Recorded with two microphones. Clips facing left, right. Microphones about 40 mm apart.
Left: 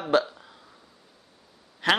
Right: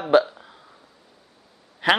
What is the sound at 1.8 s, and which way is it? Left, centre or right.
Speech, centre.